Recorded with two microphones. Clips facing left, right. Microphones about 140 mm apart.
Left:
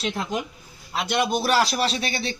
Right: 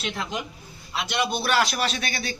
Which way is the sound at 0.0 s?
35° left (ahead or behind).